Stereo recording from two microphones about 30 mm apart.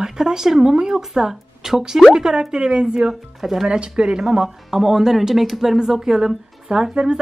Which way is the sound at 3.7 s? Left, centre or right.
Right.